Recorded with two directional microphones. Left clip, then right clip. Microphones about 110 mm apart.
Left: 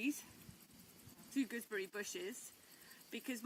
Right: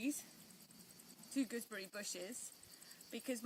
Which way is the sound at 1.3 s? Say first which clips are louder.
Left 1 dB; 30° right (ahead or behind).